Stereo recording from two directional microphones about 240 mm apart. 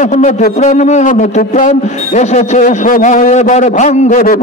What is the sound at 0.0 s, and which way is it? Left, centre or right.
A man's voice, left.